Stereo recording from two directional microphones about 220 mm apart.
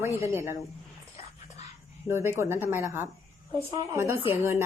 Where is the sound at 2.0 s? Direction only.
10° right (ahead or behind).